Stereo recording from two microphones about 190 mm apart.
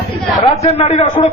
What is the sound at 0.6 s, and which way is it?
Speech, 30° left (ahead or behind).